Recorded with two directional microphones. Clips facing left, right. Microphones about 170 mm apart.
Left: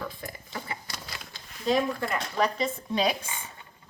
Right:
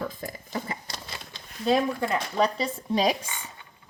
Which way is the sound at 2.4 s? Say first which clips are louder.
Even; 35° right (ahead or behind).